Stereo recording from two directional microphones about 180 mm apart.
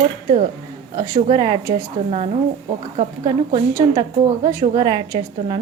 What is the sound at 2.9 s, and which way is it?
Speech, 35° right (ahead or behind).